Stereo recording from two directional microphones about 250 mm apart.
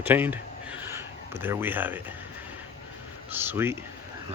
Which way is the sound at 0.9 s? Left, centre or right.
Centre.